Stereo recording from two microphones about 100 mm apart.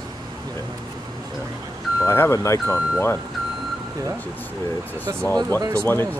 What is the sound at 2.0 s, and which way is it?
Speech, 25° left (ahead or behind).